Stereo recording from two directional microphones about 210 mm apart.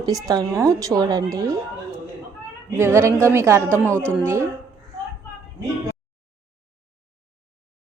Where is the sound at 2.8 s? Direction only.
10° right (ahead or behind).